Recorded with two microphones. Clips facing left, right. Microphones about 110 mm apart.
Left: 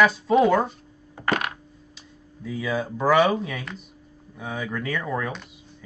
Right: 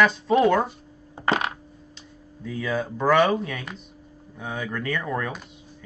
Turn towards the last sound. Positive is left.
turn(degrees=0)  # may be behind; listen again after turning